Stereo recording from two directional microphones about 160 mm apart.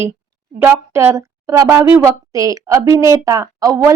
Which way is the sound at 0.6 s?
15° right (ahead or behind).